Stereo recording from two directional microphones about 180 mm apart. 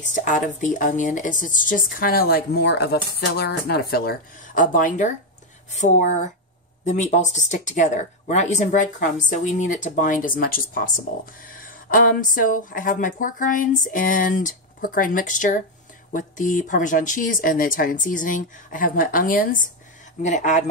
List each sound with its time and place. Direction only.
0.0 s speech: 45° left (ahead or behind)